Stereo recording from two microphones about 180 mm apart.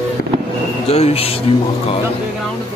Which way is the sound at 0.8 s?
35° left (ahead or behind).